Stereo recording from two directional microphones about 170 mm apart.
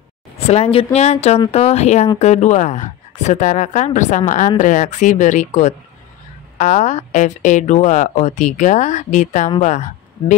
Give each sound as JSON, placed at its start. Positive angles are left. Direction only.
{"t": 0.5, "sound": "speech", "side_deg": 35}